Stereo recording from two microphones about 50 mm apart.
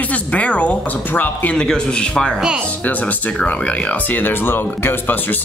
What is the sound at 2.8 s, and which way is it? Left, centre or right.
Speech, left.